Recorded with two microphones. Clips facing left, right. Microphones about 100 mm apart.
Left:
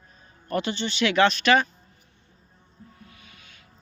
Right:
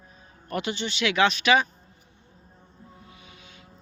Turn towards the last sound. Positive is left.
turn(degrees=-20)  # may be behind; listen again after turning